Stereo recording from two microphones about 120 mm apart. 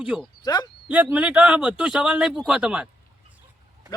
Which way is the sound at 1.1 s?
10° right (ahead or behind).